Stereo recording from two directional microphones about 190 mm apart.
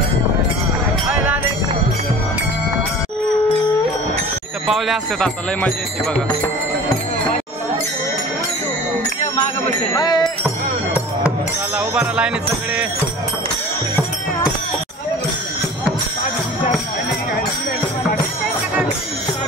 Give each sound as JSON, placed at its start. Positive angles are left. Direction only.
{"t": 1.1, "sound": "music", "side_deg": -10}
{"t": 4.6, "sound": "speech", "side_deg": 0}
{"t": 9.9, "sound": "music", "side_deg": 20}
{"t": 11.2, "sound": "speech", "side_deg": -5}